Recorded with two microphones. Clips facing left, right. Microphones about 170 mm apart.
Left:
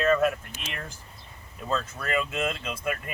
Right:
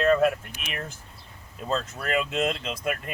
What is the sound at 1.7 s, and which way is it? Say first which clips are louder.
Speech: right 1 dB; 30° right (ahead or behind).